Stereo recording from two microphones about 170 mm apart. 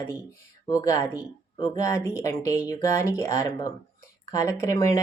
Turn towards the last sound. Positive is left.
turn(degrees=20)  # may be behind; listen again after turning